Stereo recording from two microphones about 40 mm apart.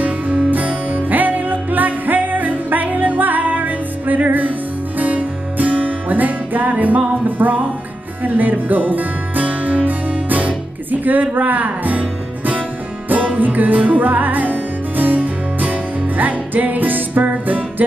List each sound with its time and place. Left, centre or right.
0.0 s music: right